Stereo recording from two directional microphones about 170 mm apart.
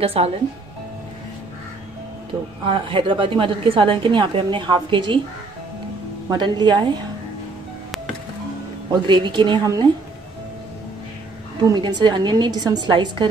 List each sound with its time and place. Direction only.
0.0 s speech: 35° right (ahead or behind)
2.6 s a woman's voice: 30° right (ahead or behind)
6.3 s a woman's voice: 25° right (ahead or behind)
9.0 s a woman's voice: 30° right (ahead or behind)
11.6 s a woman's voice: 25° right (ahead or behind)